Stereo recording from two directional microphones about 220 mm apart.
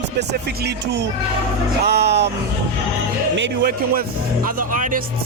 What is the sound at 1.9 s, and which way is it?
Speech, 50° right (ahead or behind).